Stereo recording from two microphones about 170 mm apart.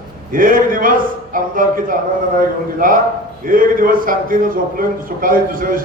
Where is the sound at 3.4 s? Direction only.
55° right (ahead or behind).